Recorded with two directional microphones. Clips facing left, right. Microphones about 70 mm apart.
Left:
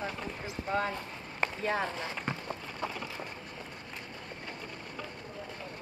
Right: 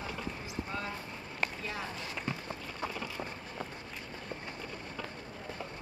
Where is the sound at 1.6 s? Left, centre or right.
Left.